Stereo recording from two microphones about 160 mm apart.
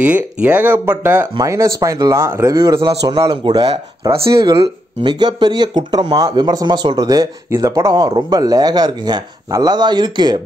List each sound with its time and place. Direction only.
0.0 s speech: 10° right (ahead or behind); by 10.4 s 25° right (ahead or behind)